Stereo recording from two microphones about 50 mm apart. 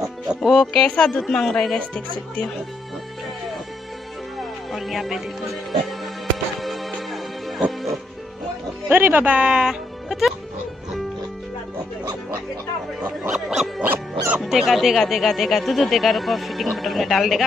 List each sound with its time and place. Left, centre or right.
0.4 s speech: centre
1.8 s speech: left
4.4 s speech: centre
6.6 s music: centre
8.8 s speech: right
9.2 s speech: right
9.5 s music: centre
10.0 s speech: centre
13.3 s a sound: centre
13.8 s music: right
14.4 s speech: centre